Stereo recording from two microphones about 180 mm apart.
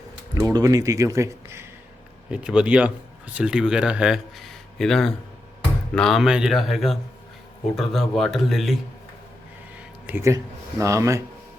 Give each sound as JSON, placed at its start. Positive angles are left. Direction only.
{"t": 0.3, "sound": "speech", "side_deg": -20}
{"t": 2.3, "sound": "speech", "side_deg": -5}
{"t": 10.1, "sound": "speech", "side_deg": -15}